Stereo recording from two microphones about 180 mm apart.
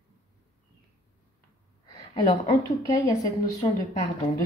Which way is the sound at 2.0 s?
30° left (ahead or behind).